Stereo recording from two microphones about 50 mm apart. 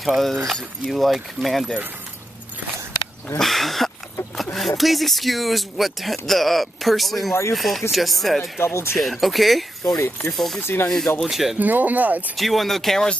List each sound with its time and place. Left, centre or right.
0.0 s speech: centre
3.3 s speech: centre
8.4 s speech: left
8.9 s speech: centre
9.9 s speech: left
10.3 s speech: centre
10.6 s speech: left
11.2 s speech: centre
11.5 s speech: right
12.4 s speech: centre